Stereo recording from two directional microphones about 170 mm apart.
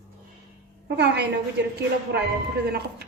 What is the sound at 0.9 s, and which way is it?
Speech, 80° right.